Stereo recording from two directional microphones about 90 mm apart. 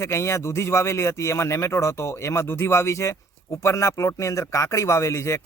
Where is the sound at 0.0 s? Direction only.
30° left (ahead or behind).